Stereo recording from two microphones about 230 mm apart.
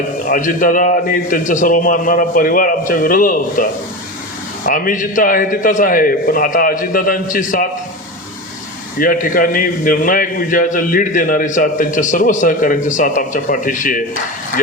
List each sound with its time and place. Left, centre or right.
0.3 s a man's voice: left
9.0 s a man's voice: left